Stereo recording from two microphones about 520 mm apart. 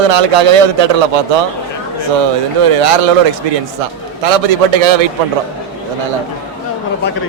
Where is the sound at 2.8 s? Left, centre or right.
Right.